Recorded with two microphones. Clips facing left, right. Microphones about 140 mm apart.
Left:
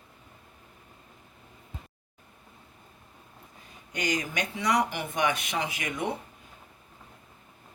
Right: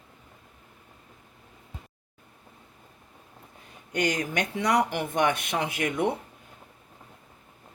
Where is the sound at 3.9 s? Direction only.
60° right (ahead or behind).